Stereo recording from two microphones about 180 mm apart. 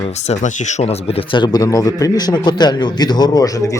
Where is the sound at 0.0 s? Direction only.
35° left (ahead or behind).